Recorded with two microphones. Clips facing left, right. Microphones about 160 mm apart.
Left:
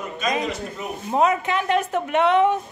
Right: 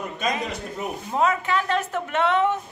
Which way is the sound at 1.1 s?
20° left (ahead or behind).